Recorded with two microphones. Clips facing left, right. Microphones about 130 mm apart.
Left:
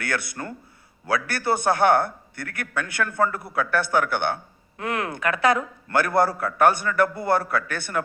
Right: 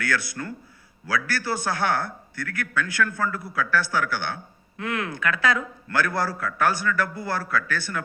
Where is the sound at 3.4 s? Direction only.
55° left (ahead or behind).